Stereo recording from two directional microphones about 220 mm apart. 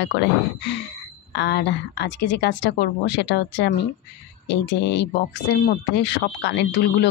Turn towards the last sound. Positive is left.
turn(degrees=50)  # may be behind; listen again after turning